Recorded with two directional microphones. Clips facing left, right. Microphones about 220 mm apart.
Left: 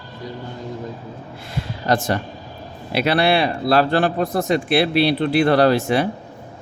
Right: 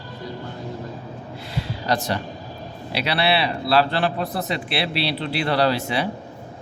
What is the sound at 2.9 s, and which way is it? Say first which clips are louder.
Speech: left 5 dB; 50° left (ahead or behind).